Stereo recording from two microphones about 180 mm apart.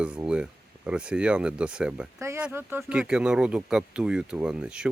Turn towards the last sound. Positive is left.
turn(degrees=-5)  # may be behind; listen again after turning